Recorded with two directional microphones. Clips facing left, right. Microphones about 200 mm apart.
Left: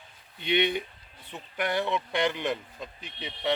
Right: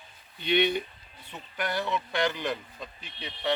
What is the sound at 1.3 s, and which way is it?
Speech, 20° left (ahead or behind).